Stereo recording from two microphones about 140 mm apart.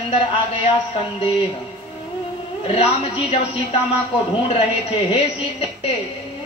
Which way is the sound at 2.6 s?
45° left (ahead or behind).